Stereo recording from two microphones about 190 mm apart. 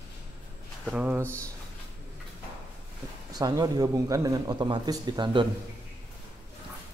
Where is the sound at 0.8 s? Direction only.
5° right (ahead or behind).